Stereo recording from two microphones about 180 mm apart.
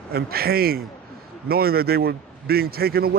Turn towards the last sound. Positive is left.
turn(degrees=-60)  # may be behind; listen again after turning